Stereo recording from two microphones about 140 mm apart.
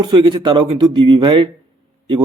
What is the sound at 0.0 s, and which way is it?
A man's voice, 35° right (ahead or behind).